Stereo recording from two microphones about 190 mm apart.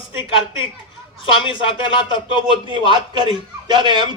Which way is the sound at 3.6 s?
25° right (ahead or behind).